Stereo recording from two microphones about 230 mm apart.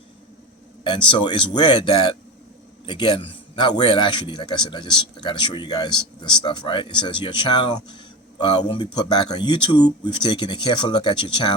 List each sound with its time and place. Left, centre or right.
1.1 s a man's voice: centre